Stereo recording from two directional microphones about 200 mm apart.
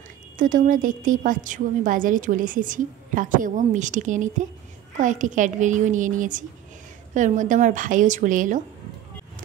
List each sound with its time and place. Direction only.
0.4 s a woman's voice: 40° right (ahead or behind)